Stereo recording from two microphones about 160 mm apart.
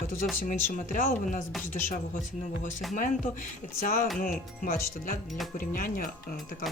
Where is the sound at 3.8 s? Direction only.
60° left (ahead or behind).